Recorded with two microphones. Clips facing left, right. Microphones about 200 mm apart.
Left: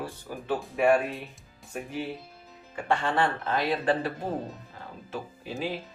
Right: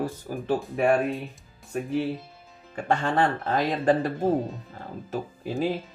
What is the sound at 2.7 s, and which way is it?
Speech, 45° right (ahead or behind).